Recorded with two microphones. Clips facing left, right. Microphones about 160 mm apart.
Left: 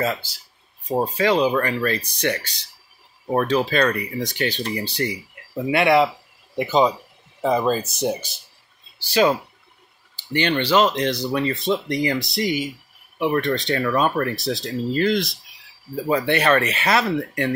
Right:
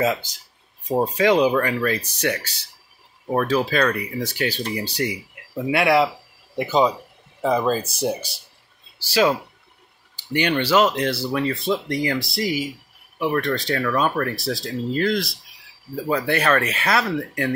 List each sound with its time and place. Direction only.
0.0 s speech: 15° right (ahead or behind)
1.5 s speech: 5° right (ahead or behind)
9.1 s speech: 5° right (ahead or behind)